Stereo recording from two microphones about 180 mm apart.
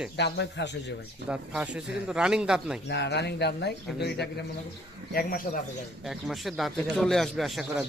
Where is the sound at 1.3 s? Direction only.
5° right (ahead or behind).